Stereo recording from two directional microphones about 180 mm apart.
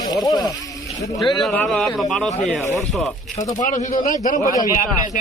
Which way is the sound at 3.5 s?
45° left (ahead or behind).